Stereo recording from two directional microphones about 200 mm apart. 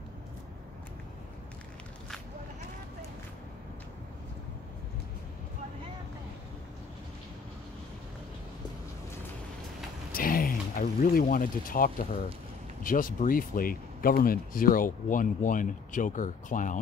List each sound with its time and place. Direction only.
10.1 s speech: 45° left (ahead or behind)